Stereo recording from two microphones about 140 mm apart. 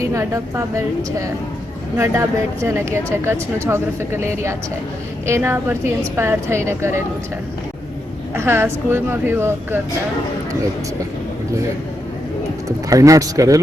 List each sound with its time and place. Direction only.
0.1 s speech: 20° right (ahead or behind)
2.0 s a woman's voice: 20° right (ahead or behind)
8.4 s a woman's voice: 15° right (ahead or behind)
12.9 s speech: 25° right (ahead or behind)